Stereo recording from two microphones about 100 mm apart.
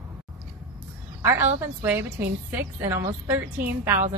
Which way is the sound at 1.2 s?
25° right (ahead or behind).